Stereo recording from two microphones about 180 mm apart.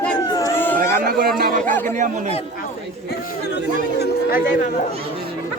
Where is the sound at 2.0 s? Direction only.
45° right (ahead or behind).